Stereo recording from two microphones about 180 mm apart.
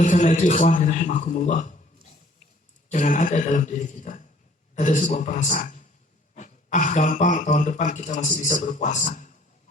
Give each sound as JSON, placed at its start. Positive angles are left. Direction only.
{"t": 0.0, "sound": "speech", "side_deg": 45}
{"t": 2.9, "sound": "speech", "side_deg": 45}